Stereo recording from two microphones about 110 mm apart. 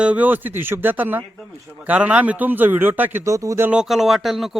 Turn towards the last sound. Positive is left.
turn(degrees=0)  # may be behind; listen again after turning